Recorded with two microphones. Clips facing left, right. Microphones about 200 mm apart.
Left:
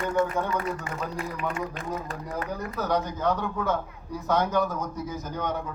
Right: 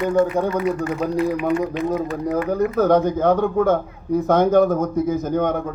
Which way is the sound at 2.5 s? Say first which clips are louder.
Right 11 dB; 50° right (ahead or behind).